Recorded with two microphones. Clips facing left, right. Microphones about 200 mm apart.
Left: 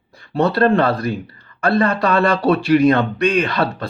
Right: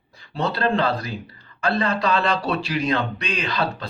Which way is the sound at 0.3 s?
60° left (ahead or behind).